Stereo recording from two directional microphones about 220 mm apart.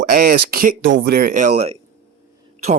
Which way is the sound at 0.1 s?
40° right (ahead or behind).